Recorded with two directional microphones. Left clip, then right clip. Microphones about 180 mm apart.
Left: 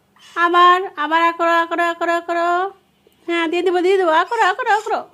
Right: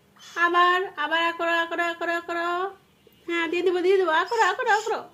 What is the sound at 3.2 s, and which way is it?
A woman's voice, 25° left (ahead or behind).